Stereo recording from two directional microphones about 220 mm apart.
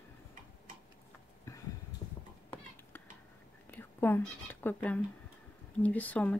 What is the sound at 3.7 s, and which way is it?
Whispering, 10° left (ahead or behind).